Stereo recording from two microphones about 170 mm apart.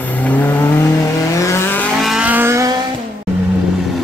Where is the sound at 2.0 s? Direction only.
5° right (ahead or behind).